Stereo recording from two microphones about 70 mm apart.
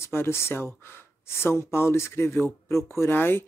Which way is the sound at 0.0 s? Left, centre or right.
Left.